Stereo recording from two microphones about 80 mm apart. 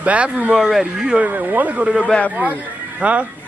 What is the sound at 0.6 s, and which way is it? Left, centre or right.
Speech, centre.